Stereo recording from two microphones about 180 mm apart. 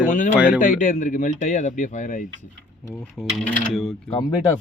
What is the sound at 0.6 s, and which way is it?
Speech, 45° left (ahead or behind).